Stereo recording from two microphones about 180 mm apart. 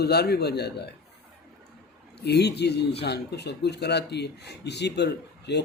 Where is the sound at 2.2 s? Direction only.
65° left (ahead or behind).